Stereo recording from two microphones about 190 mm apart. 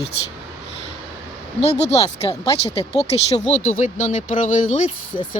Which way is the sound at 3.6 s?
40° left (ahead or behind).